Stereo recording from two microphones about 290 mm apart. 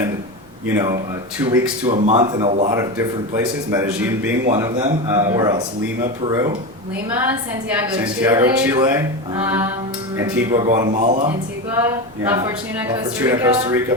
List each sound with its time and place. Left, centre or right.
0.7 s speech: centre
1.9 s speech: right
3.7 s speech: centre
7.8 s speech: centre; by 11.3 s right
12.2 s speech: centre